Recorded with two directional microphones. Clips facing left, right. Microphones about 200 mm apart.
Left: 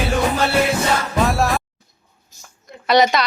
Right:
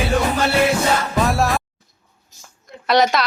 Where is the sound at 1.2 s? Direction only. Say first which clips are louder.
Left 2 dB; centre (ahead or behind).